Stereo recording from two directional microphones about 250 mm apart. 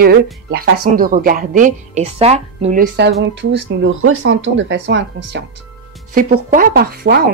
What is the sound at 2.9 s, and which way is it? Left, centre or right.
Speech, right.